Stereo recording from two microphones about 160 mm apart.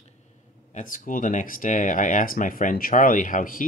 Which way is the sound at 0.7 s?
55° left (ahead or behind).